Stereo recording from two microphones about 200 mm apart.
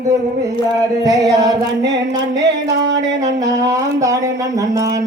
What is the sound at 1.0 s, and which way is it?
Speech, 15° right (ahead or behind).